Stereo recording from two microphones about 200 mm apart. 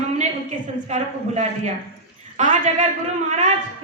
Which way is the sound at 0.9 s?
35° right (ahead or behind).